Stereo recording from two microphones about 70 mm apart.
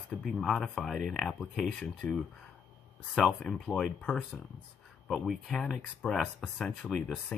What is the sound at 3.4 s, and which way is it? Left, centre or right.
Speech, centre.